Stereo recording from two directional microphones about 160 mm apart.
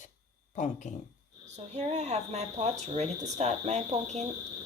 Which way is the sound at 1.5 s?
45° right (ahead or behind).